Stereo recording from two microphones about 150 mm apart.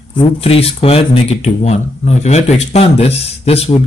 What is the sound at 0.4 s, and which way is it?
Speech, 40° left (ahead or behind).